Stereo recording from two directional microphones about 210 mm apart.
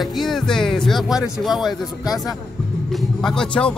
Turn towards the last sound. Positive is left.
turn(degrees=5)  # may be behind; listen again after turning